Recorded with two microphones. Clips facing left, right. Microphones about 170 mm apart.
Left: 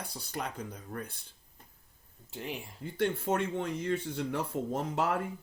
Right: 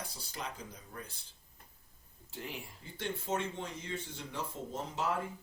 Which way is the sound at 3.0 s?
60° left (ahead or behind).